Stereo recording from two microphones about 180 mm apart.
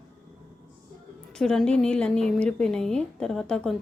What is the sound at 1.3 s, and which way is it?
A woman's voice, 5° left (ahead or behind).